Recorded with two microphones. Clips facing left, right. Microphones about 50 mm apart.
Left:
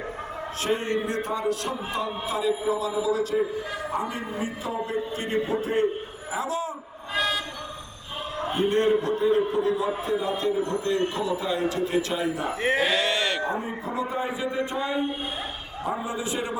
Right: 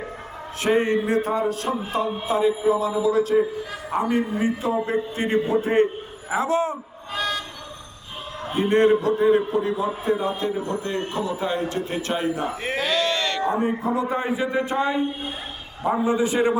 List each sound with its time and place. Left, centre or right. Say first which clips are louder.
0.6 s a man's voice: right 6 dB; right
1.6 s a man's voice: right 4 dB; right
7.1 s vehicle: even; centre
8.5 s a man's voice: right 4 dB; right
12.6 s a sound: left 1 dB; centre
13.6 s a man's voice: right 7 dB; right
16.0 s a man's voice: right 9 dB; right